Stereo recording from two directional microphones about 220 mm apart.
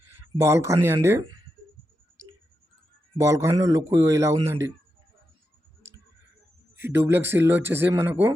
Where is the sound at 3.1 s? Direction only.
15° right (ahead or behind).